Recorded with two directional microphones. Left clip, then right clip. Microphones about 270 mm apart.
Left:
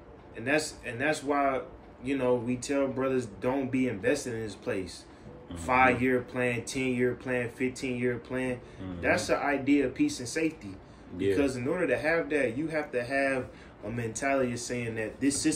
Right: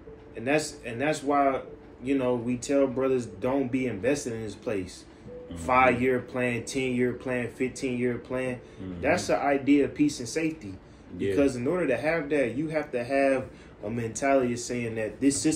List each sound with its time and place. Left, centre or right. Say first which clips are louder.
0.4 s speech: right 2 dB; centre